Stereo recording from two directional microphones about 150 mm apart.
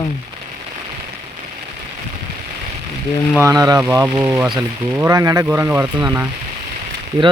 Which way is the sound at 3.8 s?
15° right (ahead or behind).